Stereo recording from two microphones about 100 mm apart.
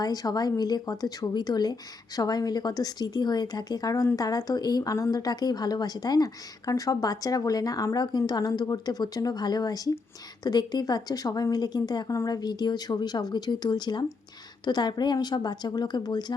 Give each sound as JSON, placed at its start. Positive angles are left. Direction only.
{"t": 0.0, "sound": "a woman's voice", "side_deg": 40}